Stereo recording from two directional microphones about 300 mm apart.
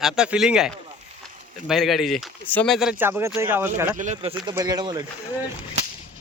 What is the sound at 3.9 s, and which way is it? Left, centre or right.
Speech, right.